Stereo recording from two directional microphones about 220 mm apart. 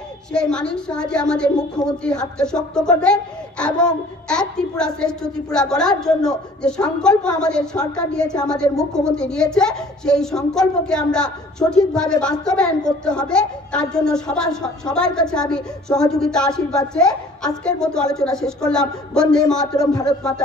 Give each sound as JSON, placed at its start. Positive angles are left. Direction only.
{"t": 0.3, "sound": "a woman's voice", "side_deg": 5}
{"t": 19.6, "sound": "a man's voice", "side_deg": 15}